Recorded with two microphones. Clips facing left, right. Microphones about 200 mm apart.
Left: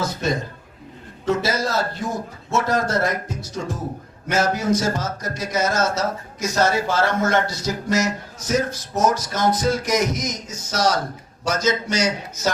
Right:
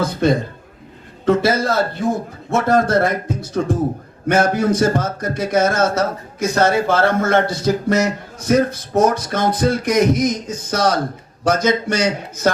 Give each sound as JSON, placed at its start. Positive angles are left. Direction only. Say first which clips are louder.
{"t": 0.0, "sound": "speech", "louder": "right 7 dB", "side_deg": -55}